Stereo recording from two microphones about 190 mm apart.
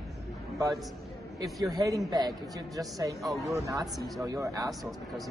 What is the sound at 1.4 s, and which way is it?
A woman's voice, 20° right (ahead or behind).